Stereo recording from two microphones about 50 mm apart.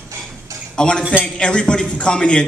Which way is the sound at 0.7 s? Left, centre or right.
Centre.